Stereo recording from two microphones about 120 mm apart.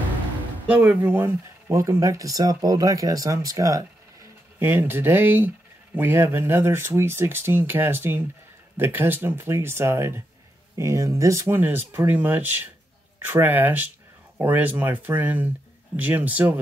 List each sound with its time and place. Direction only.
0.7 s speech: 15° right (ahead or behind)